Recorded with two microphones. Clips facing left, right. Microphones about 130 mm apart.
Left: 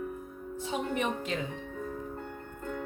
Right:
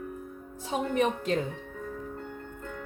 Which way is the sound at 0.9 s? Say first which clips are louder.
Right 5 dB; 45° right (ahead or behind).